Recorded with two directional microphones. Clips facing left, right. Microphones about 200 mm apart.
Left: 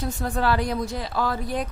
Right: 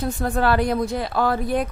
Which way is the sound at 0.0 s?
55° right (ahead or behind).